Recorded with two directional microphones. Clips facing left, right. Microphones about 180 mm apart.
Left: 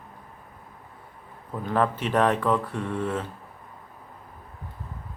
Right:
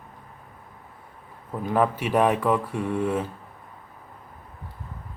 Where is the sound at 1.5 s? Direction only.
10° right (ahead or behind).